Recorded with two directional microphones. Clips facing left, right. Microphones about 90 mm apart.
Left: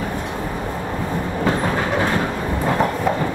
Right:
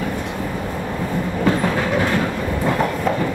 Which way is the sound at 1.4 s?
25° left (ahead or behind).